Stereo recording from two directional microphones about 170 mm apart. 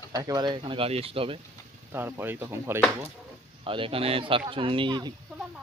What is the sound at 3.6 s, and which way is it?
Speech, 30° right (ahead or behind).